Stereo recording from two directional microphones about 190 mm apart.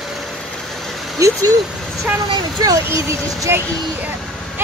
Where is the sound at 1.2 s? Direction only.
15° right (ahead or behind).